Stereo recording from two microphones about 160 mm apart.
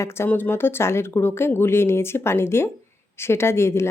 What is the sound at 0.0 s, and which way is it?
A woman's voice, 15° left (ahead or behind).